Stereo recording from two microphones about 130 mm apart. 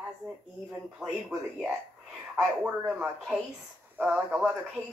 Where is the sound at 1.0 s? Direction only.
10° right (ahead or behind).